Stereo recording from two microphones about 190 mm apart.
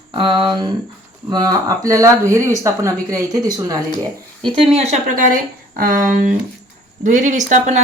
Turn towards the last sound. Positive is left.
turn(degrees=-40)  # may be behind; listen again after turning